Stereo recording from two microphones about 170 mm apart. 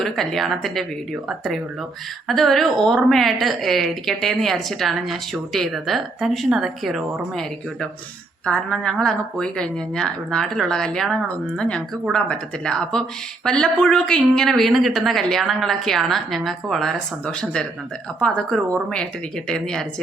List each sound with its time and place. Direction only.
0.0 s a woman's voice: centre (ahead or behind)